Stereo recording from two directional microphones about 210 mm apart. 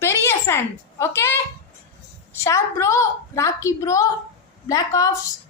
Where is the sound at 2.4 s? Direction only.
15° left (ahead or behind).